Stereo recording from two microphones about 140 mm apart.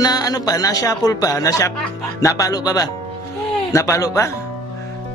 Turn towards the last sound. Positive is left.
turn(degrees=20)  # may be behind; listen again after turning